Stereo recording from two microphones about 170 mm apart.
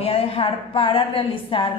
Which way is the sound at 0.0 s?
35° left (ahead or behind).